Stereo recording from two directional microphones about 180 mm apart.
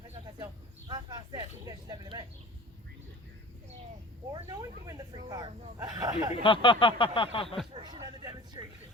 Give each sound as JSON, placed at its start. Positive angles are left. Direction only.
{"t": 0.9, "sound": "speech", "side_deg": -20}
{"t": 4.3, "sound": "speech", "side_deg": -20}
{"t": 6.3, "sound": "speech", "side_deg": 30}
{"t": 7.7, "sound": "a sound", "side_deg": -25}